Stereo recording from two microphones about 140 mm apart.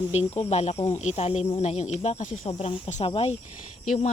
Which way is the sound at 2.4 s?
50° left (ahead or behind).